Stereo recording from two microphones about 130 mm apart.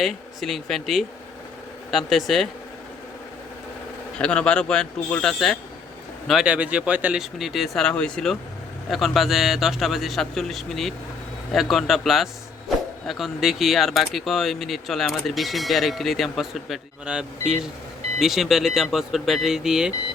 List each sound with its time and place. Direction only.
0.0 s speech: centre (ahead or behind)
4.2 s speech: 10° left (ahead or behind)